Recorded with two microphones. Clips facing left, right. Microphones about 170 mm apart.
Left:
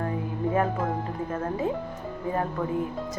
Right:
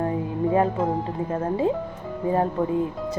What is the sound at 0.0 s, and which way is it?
A woman's voice, 25° right (ahead or behind).